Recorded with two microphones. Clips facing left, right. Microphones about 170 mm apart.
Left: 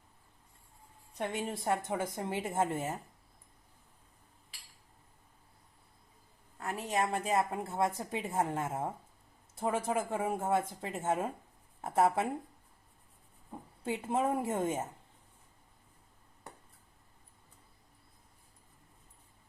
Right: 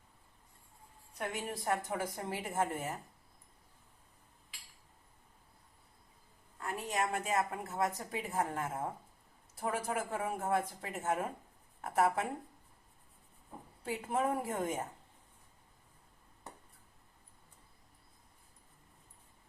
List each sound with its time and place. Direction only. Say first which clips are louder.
1.2 s a woman's voice: left 3 dB; 25° left (ahead or behind)
6.6 s a woman's voice: left 3 dB; 35° left (ahead or behind)
13.8 s a woman's voice: left 2 dB; 25° left (ahead or behind)